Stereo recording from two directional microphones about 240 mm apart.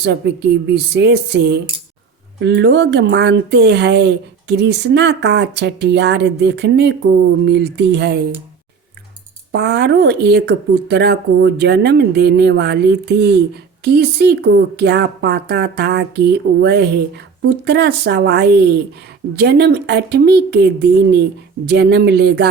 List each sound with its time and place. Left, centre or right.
0.0 s speech: right
9.5 s speech: right